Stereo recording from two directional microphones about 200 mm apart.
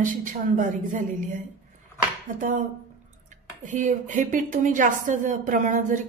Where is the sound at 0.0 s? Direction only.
40° right (ahead or behind).